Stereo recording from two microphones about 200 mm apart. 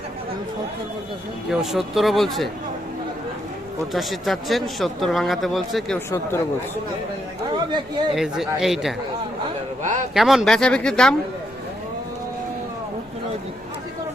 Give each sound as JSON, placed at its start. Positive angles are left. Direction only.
{"t": 1.5, "sound": "speech", "side_deg": 0}
{"t": 3.9, "sound": "speech", "side_deg": 0}
{"t": 7.5, "sound": "speech", "side_deg": -20}
{"t": 8.1, "sound": "speech", "side_deg": 0}
{"t": 10.2, "sound": "speech", "side_deg": 0}